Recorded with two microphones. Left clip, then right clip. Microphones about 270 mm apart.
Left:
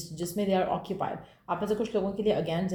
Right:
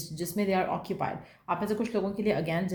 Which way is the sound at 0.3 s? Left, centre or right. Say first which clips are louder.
Left 1 dB; right.